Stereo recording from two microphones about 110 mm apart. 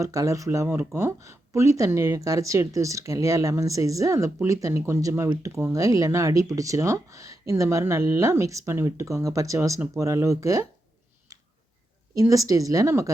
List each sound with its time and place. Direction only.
0.0 s speech: 30° right (ahead or behind)
11.3 s a sound: 35° right (ahead or behind)
12.1 s speech: 30° right (ahead or behind)